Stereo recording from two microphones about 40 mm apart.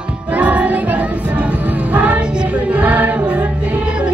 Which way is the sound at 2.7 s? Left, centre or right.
Right.